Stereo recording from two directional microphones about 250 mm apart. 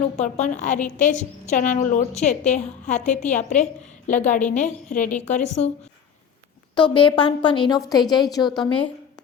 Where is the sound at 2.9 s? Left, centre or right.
Centre.